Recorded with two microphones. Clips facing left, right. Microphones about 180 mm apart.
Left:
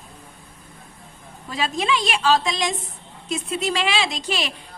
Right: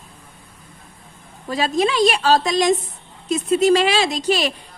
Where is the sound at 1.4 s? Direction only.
40° right (ahead or behind).